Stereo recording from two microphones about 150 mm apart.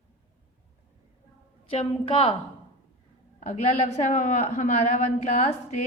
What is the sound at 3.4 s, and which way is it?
A woman's voice, 50° left (ahead or behind).